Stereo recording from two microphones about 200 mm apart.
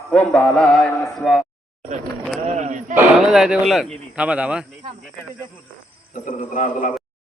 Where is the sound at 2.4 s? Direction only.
35° right (ahead or behind).